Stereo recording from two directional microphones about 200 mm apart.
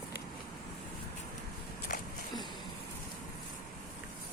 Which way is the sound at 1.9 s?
45° left (ahead or behind).